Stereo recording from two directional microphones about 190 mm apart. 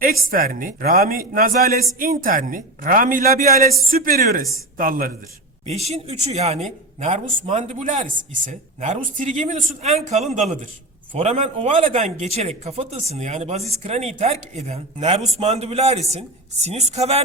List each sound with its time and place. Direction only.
0.0 s speech: 50° right (ahead or behind)
5.6 s a man's voice: 35° right (ahead or behind)